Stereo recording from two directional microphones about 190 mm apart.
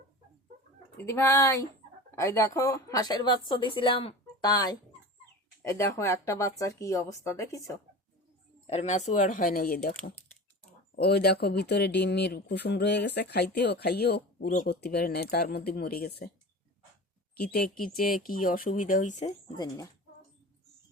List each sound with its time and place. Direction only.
0.9 s a woman's voice: 15° left (ahead or behind)
8.6 s speech: 35° left (ahead or behind); by 9.9 s 50° left (ahead or behind)
10.9 s speech: 60° left (ahead or behind)
17.5 s speech: 50° left (ahead or behind)
19.2 s a woman's voice: 20° left (ahead or behind)